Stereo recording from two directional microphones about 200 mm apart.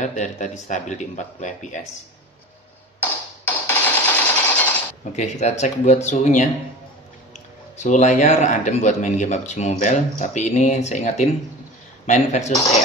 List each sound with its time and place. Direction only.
0.0 s speech: 35° left (ahead or behind)
3.0 s music: 10° left (ahead or behind)
5.1 s speech: 35° left (ahead or behind)
7.7 s speech: 35° left (ahead or behind)